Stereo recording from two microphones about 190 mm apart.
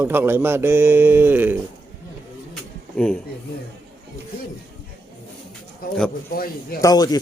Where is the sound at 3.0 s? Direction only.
5° left (ahead or behind).